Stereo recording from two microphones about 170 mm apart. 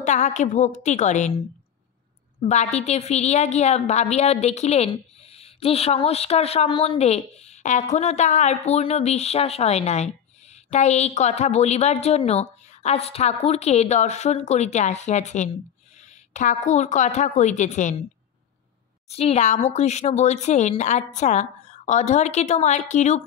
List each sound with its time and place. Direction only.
0.0 s speech: 45° left (ahead or behind)
2.4 s a woman's voice: 45° left (ahead or behind)
19.0 s speech: 35° left (ahead or behind)